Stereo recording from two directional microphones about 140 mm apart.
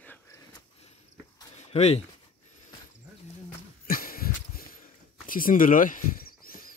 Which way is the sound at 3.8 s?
90° left.